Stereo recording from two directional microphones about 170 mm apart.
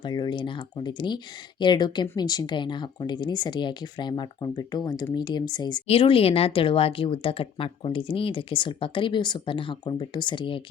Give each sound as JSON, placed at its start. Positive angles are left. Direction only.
{"t": 0.0, "sound": "speech", "side_deg": 25}